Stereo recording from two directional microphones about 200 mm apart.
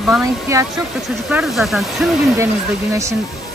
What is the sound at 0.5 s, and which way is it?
Speech, 15° right (ahead or behind).